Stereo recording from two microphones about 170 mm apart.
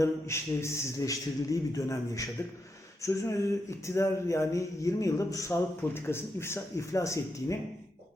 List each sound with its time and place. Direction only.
0.0 s a man's voice: 15° left (ahead or behind)